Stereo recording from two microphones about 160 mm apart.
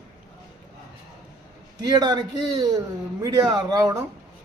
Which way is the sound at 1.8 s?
25° right (ahead or behind).